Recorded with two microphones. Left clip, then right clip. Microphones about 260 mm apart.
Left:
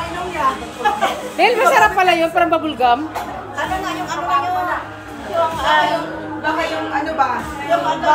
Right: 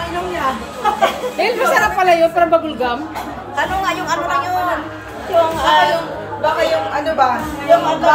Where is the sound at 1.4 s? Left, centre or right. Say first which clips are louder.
Left 3 dB; centre.